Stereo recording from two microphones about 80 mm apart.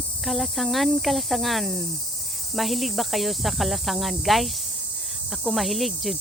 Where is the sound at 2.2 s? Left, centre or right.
Centre.